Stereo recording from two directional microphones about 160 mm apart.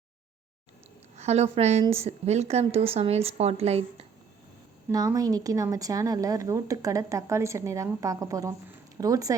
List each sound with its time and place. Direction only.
1.1 s a woman's voice: 45° right (ahead or behind)
1.8 s a woman's voice: 15° right (ahead or behind)
2.0 s a woman's voice: 45° right (ahead or behind)
4.9 s speech: 20° right (ahead or behind)